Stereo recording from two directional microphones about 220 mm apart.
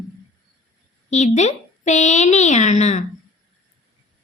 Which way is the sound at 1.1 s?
30° left (ahead or behind).